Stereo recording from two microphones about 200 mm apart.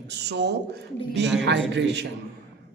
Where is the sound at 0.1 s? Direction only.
60° right (ahead or behind).